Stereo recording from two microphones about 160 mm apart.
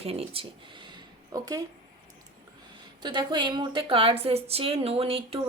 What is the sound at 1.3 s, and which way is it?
Speech, 20° right (ahead or behind).